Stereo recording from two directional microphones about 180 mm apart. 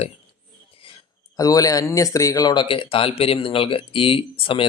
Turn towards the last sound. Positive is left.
turn(degrees=30)  # may be behind; listen again after turning